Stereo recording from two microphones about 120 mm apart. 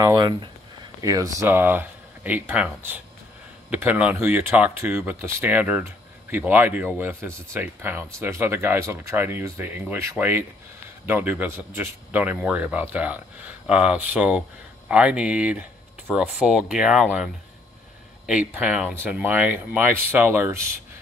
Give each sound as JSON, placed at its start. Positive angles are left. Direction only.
{"t": 0.0, "sound": "speech", "side_deg": -35}
{"t": 1.0, "sound": "speech", "side_deg": -30}